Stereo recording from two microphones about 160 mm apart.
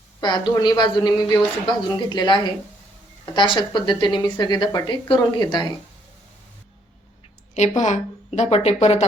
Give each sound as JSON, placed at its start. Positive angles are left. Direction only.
{"t": 0.2, "sound": "speech", "side_deg": 25}
{"t": 7.8, "sound": "speech", "side_deg": 50}